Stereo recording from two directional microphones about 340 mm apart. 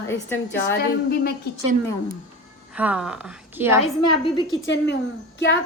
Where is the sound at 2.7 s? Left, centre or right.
Centre.